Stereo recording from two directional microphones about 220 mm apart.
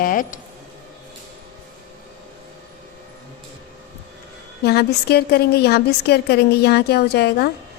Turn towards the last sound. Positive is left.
turn(degrees=45)  # may be behind; listen again after turning